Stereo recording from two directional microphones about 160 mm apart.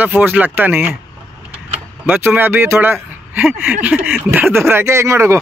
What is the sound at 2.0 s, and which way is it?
Speech, 10° right (ahead or behind).